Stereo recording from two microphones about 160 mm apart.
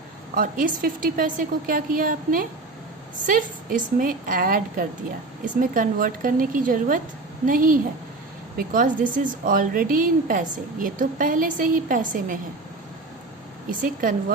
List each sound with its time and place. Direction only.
0.3 s speech: 60° right (ahead or behind)
13.7 s speech: 55° right (ahead or behind)